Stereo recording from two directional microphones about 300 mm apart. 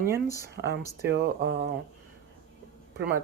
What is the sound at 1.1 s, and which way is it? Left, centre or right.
Speech, right.